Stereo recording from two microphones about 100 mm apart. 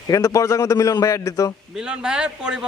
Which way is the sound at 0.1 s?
35° left (ahead or behind).